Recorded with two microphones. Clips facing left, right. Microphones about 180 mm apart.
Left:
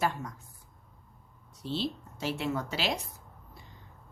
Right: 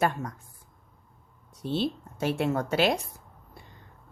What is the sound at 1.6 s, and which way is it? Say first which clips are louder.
A woman's voice: right 5 dB; 55° right (ahead or behind).